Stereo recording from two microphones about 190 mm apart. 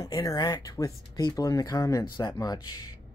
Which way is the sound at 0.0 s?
20° left (ahead or behind).